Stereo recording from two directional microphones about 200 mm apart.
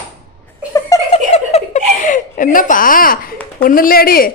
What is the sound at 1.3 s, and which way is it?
Giggle, 35° left (ahead or behind).